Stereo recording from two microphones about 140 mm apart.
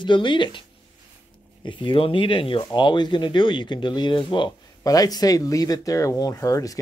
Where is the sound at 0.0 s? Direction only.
35° left (ahead or behind).